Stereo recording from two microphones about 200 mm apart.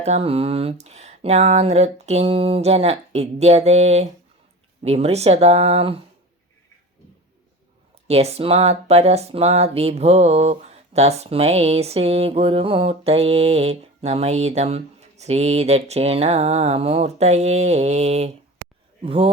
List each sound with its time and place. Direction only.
0.0 s speech: 30° right (ahead or behind)
8.0 s a man's voice: 30° right (ahead or behind)